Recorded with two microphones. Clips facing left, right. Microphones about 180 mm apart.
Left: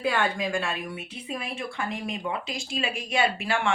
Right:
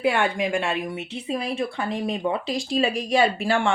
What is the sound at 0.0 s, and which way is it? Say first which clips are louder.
Speech: right 4 dB; 25° right (ahead or behind).